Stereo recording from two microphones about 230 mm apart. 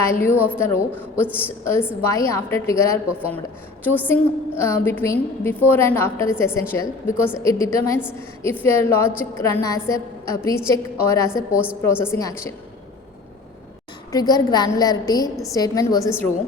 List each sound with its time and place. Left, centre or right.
0.0 s a woman's voice: centre
0.3 s a woman's voice: centre
0.6 s a woman's voice: centre
11.5 s a woman's voice: centre
11.8 s a woman's voice: centre
14.1 s a woman's voice: centre